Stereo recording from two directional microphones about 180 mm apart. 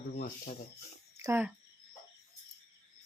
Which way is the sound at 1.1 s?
15° right (ahead or behind).